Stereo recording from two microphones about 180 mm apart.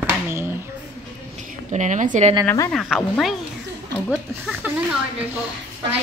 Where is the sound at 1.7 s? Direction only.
45° right (ahead or behind).